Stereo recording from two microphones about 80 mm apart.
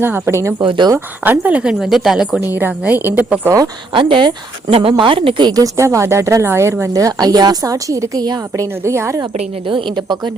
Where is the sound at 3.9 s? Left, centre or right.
Right.